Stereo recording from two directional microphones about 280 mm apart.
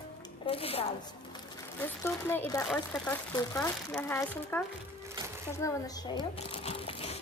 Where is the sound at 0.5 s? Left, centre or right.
Left.